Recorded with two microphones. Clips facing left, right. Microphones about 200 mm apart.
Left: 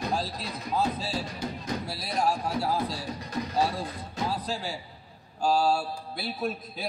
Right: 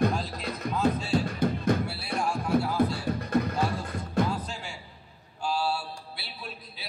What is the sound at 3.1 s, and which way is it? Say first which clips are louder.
Music: right 7 dB; 55° right (ahead or behind).